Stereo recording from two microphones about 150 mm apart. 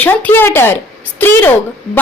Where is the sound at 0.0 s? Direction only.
10° left (ahead or behind).